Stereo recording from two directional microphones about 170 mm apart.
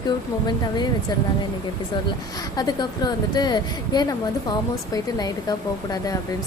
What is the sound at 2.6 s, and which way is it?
A woman's voice, 25° left (ahead or behind).